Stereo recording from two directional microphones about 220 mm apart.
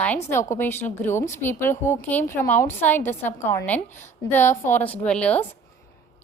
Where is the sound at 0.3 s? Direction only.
10° left (ahead or behind).